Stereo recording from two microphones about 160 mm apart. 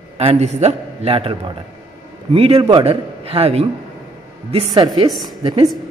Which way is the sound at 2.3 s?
35° right (ahead or behind).